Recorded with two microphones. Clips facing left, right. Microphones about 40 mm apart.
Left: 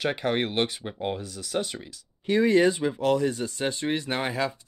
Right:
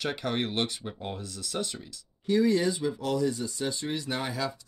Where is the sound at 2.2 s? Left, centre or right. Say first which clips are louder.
Left 4 dB; left.